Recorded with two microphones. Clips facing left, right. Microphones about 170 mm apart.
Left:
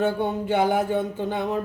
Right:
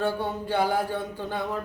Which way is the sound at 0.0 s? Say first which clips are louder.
Left 4 dB; 20° left (ahead or behind).